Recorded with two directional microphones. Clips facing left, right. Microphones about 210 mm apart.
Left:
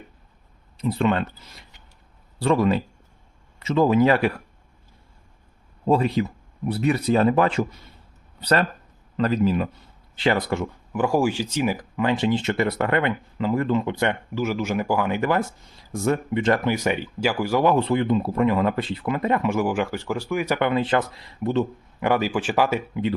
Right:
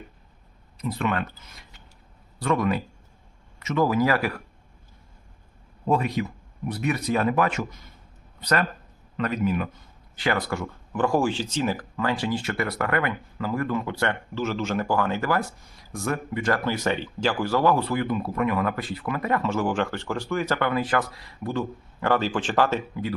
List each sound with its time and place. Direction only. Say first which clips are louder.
0.8 s speech: left 5 dB; 25° left (ahead or behind)
2.4 s speech: left 4 dB; 30° left (ahead or behind)
5.8 s a man's voice: left 4 dB; 30° left (ahead or behind)
10.9 s speech: left 2 dB; 10° left (ahead or behind)
16.7 s speech: left 2 dB; 10° left (ahead or behind)
22.0 s speech: left 2 dB; 10° left (ahead or behind)